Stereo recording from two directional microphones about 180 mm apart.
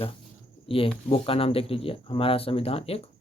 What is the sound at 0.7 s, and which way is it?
Speech, 30° left (ahead or behind).